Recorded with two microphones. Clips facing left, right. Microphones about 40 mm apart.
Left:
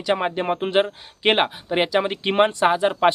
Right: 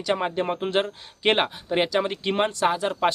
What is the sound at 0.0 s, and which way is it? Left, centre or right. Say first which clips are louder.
Speech: left 3 dB; centre.